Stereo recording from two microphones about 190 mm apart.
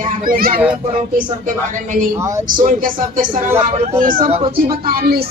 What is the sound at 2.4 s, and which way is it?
Speech, 45° right (ahead or behind).